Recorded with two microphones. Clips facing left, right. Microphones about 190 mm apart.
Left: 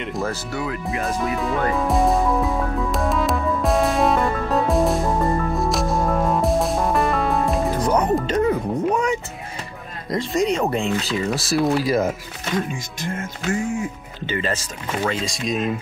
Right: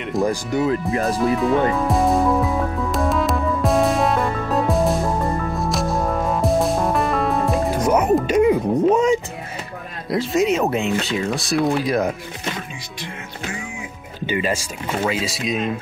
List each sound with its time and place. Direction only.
0.2 s speech: 20° right (ahead or behind)
0.9 s speech: 35° right (ahead or behind)
1.3 s speech: centre (ahead or behind)
1.8 s music: centre (ahead or behind)
7.8 s speech: 10° right (ahead or behind)
10.0 s speech: 5° right (ahead or behind)
13.0 s music: 45° left (ahead or behind)
14.2 s speech: 10° right (ahead or behind)